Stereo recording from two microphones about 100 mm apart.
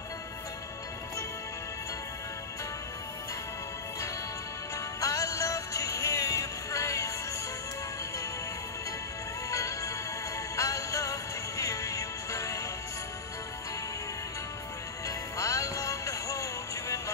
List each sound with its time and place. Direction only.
5.0 s music: 35° left (ahead or behind)
9.5 s music: 35° left (ahead or behind)
15.0 s music: 35° left (ahead or behind)